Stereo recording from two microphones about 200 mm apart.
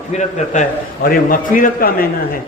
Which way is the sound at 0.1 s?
35° left (ahead or behind).